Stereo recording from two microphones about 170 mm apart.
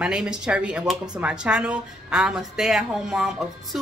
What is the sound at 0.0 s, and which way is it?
A woman's voice, 5° right (ahead or behind).